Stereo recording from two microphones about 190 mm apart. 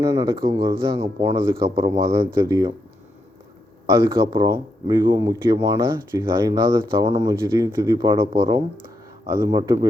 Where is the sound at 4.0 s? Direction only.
25° right (ahead or behind).